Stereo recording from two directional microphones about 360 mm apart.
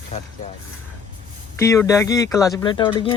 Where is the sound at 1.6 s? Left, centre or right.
Centre.